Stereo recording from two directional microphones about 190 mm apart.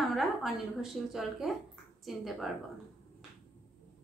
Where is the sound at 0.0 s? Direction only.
Centre (ahead or behind).